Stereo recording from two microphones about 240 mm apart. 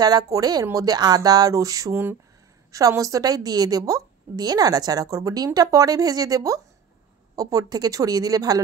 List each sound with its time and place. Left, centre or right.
0.0 s a woman's voice: centre